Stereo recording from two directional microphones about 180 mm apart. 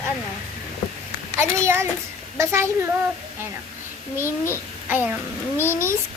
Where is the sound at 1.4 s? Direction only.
15° right (ahead or behind).